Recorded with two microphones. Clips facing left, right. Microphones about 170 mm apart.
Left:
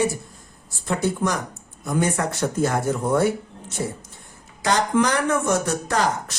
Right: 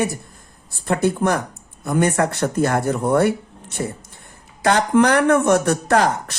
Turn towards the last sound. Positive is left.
turn(degrees=-60)  # may be behind; listen again after turning